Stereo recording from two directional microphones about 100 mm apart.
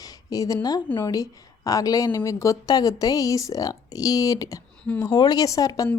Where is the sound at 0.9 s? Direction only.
40° left (ahead or behind).